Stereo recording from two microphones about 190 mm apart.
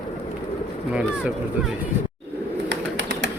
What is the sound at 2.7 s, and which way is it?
Bird, 70° right (ahead or behind).